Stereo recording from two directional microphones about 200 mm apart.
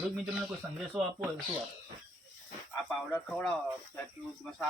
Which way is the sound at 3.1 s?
5° left (ahead or behind).